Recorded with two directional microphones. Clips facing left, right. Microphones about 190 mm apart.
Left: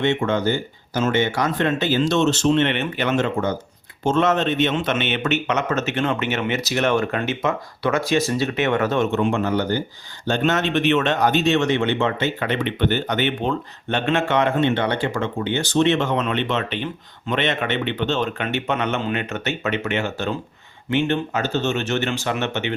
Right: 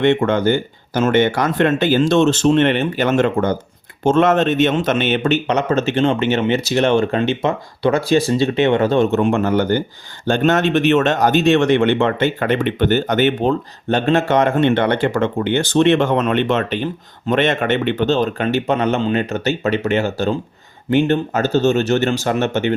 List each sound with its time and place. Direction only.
0.0 s speech: 55° right (ahead or behind)
2.7 s speech: 35° right (ahead or behind)
9.2 s speech: 50° right (ahead or behind)